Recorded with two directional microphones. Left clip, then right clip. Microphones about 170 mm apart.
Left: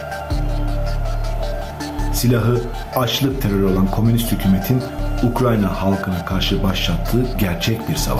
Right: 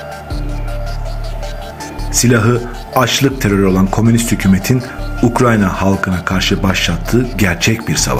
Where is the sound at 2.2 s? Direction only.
35° right (ahead or behind).